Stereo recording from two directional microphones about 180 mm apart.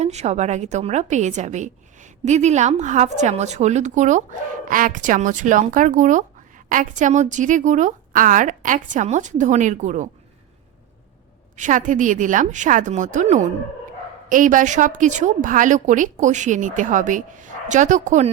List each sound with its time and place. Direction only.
0.0 s a woman's voice: 40° right (ahead or behind)
11.5 s a woman's voice: 45° right (ahead or behind)